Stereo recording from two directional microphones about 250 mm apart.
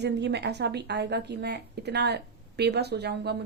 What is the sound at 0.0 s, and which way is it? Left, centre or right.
Speech, right.